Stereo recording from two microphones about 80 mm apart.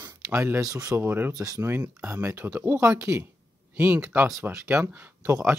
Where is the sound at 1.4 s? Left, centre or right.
Right.